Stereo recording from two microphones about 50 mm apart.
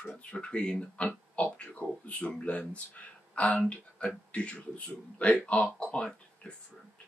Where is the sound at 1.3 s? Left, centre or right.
Left.